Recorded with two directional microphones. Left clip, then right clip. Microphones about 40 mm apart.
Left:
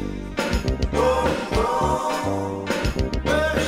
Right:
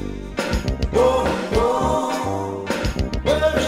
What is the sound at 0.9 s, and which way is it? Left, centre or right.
Music, right.